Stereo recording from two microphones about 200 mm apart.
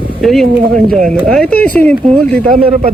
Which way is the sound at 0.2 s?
Centre (ahead or behind).